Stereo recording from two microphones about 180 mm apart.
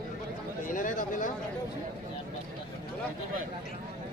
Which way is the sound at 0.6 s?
45° left (ahead or behind).